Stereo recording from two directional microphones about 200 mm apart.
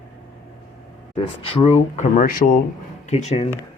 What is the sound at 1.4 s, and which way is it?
Speech, 30° left (ahead or behind).